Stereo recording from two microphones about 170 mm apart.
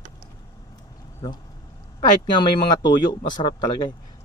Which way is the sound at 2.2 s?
25° left (ahead or behind).